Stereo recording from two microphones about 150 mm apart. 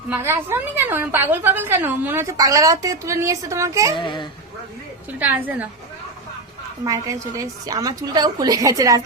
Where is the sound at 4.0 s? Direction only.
30° left (ahead or behind).